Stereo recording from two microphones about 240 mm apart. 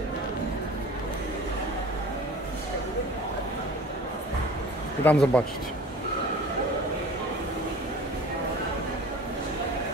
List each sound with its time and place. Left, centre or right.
5.0 s speech: centre